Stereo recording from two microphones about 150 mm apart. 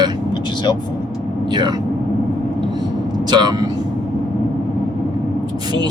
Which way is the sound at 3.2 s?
30° right (ahead or behind).